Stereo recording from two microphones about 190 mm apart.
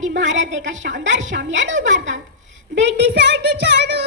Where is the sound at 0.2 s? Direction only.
75° right (ahead or behind).